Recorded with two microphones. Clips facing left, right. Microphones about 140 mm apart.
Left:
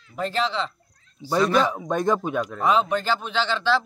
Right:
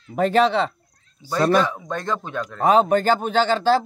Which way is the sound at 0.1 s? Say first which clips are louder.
Right 8 dB; 60° right (ahead or behind).